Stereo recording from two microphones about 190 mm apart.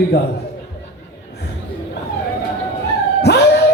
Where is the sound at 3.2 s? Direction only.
60° left (ahead or behind).